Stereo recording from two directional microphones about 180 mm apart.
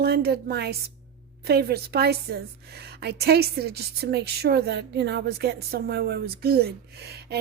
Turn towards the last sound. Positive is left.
turn(degrees=-65)  # may be behind; listen again after turning